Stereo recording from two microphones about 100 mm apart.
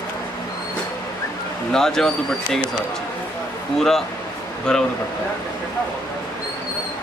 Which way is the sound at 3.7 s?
5° left (ahead or behind).